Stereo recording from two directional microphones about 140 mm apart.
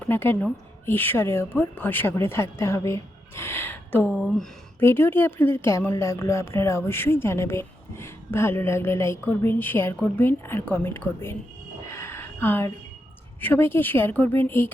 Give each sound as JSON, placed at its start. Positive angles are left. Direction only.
{"t": 0.0, "sound": "a woman's voice", "side_deg": 15}
{"t": 11.8, "sound": "a sound", "side_deg": 20}
{"t": 13.4, "sound": "speech", "side_deg": 15}